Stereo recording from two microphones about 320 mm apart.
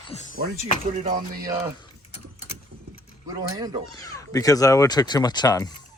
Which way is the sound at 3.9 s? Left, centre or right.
Centre.